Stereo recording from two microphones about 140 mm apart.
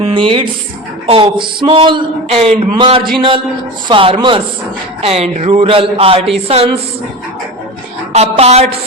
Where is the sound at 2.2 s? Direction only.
50° right (ahead or behind).